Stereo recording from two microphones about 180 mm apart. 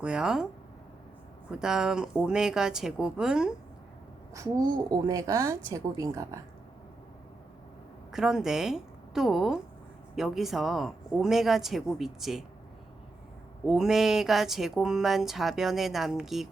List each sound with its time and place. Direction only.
0.0 s speech: 5° right (ahead or behind)
1.5 s speech: 5° right (ahead or behind)
4.4 s a woman's voice: 20° right (ahead or behind)
8.1 s speech: 5° right (ahead or behind)
13.7 s speech: centre (ahead or behind)